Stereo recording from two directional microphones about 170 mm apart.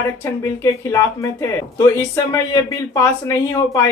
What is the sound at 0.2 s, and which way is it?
Speech, 15° left (ahead or behind).